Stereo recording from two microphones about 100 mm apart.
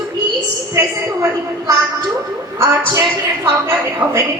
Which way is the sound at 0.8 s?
35° right (ahead or behind).